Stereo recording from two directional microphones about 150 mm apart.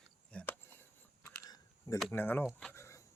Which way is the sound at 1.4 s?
25° left (ahead or behind).